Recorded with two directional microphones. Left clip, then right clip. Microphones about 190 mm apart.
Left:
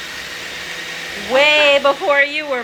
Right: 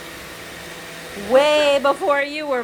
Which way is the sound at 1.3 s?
Centre (ahead or behind).